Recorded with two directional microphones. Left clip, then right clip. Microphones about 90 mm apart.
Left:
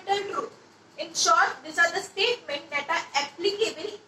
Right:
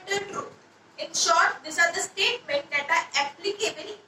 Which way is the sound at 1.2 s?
30° right (ahead or behind).